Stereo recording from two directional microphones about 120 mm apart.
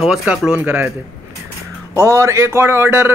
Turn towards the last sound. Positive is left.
turn(degrees=-20)  # may be behind; listen again after turning